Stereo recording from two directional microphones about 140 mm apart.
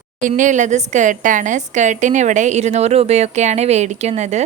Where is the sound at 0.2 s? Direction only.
65° right (ahead or behind).